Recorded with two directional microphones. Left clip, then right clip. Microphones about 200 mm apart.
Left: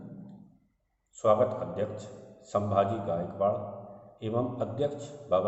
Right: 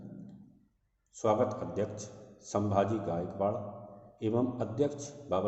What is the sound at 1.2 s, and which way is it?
A man's voice, 45° right (ahead or behind).